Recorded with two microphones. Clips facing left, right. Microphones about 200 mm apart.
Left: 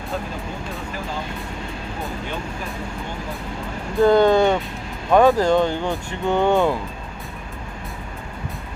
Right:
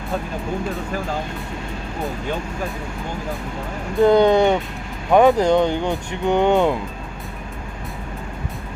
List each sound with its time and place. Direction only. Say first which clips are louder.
4.0 s speech: right 1 dB; 20° right (ahead or behind)